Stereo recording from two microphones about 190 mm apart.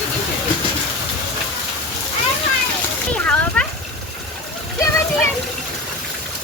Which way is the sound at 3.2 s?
5° left (ahead or behind).